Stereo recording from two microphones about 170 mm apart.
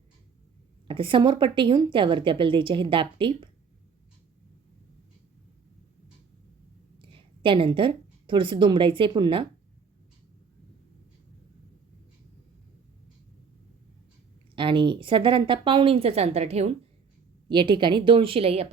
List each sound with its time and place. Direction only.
0.9 s a woman's voice: 30° right (ahead or behind)
7.0 s speech: 30° right (ahead or behind)
14.5 s a woman's voice: 30° right (ahead or behind)
17.5 s a woman's voice: 30° right (ahead or behind)